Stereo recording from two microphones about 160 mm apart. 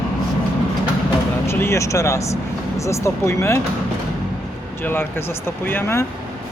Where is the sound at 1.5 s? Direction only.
15° left (ahead or behind).